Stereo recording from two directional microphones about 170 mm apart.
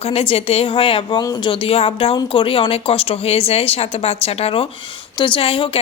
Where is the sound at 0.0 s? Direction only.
35° left (ahead or behind).